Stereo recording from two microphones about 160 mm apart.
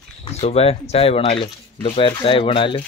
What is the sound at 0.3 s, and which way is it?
Speech, 40° left (ahead or behind).